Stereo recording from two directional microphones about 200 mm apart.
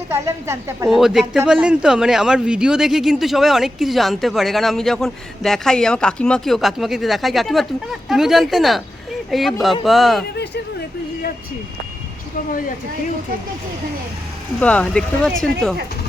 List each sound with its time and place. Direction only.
0.1 s a woman's voice: 15° right (ahead or behind)
0.9 s speech: centre (ahead or behind)
10.3 s speech: 55° left (ahead or behind)
14.6 s speech: 5° left (ahead or behind)